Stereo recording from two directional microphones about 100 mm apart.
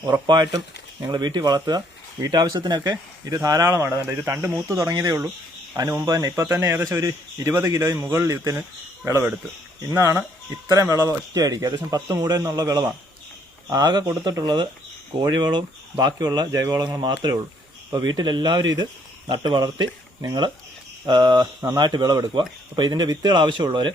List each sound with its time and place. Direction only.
0.0 s speech: 45° right (ahead or behind); by 4.8 s 25° right (ahead or behind)
4.8 s speech: 40° right (ahead or behind)
9.9 s speech: 25° right (ahead or behind)
12.5 s speech: 40° right (ahead or behind)